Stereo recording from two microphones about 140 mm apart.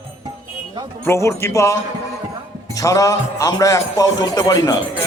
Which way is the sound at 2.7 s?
25° left (ahead or behind).